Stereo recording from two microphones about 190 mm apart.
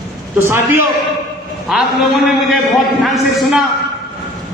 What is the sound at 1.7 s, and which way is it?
A man's voice, centre (ahead or behind).